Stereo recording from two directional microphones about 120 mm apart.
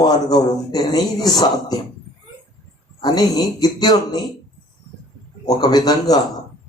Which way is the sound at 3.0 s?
35° left (ahead or behind).